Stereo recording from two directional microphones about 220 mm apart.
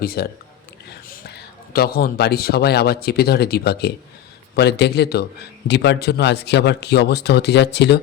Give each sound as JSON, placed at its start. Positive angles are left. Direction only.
{"t": 0.0, "sound": "a man's voice", "side_deg": 45}